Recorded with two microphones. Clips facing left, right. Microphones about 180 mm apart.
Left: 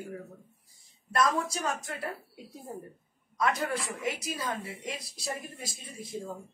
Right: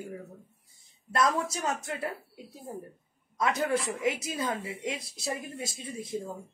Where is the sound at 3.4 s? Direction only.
25° right (ahead or behind).